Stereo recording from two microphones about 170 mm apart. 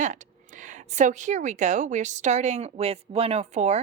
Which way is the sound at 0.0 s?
45° right (ahead or behind).